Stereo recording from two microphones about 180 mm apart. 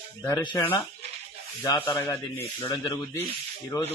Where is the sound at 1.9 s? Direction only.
20° left (ahead or behind).